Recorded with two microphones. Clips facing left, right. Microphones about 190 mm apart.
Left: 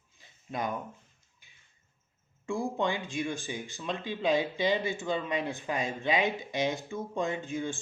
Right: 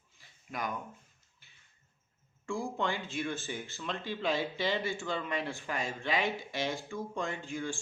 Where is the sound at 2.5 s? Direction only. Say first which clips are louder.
Left 4 dB; 20° left (ahead or behind).